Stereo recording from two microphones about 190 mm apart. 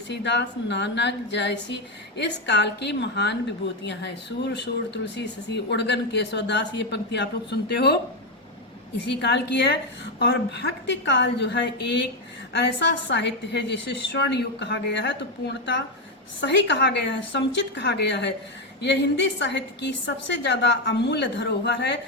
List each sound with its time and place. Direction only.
0.1 s a woman's voice: 65° left (ahead or behind)
9.0 s a woman's voice: 65° left (ahead or behind)